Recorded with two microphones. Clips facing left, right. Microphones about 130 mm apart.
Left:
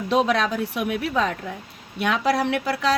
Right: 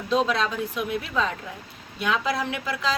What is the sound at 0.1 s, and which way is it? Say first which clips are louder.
A woman's voice: left 3 dB; 65° left (ahead or behind).